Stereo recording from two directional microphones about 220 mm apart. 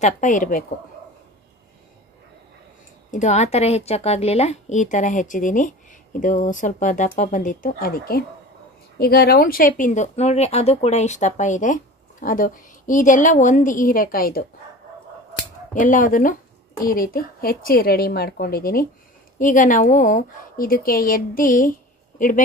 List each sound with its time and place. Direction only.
0.0 s speech: 35° left (ahead or behind)
3.1 s speech: 30° left (ahead or behind)
15.7 s speech: 35° left (ahead or behind)